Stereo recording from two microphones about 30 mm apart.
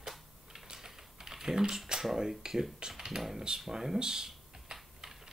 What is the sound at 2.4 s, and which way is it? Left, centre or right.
Speech, centre.